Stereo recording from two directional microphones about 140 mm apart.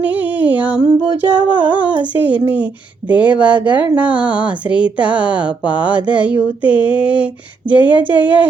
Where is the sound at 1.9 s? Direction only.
10° right (ahead or behind).